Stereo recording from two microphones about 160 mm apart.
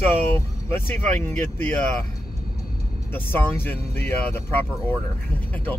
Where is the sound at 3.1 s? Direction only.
10° left (ahead or behind).